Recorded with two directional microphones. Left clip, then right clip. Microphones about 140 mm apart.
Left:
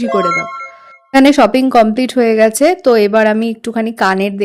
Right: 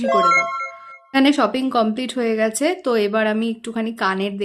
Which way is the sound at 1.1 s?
45° left (ahead or behind).